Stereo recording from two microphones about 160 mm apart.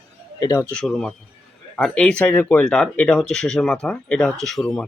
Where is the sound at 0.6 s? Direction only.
5° left (ahead or behind).